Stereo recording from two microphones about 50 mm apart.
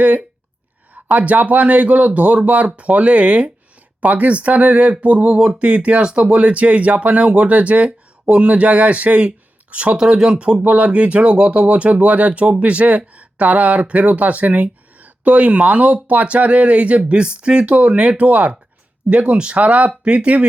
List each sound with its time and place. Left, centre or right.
1.2 s speech: right
10.6 s speech: right